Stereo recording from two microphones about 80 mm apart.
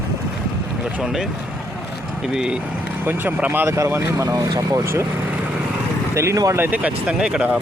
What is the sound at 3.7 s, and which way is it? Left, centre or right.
Speech, right.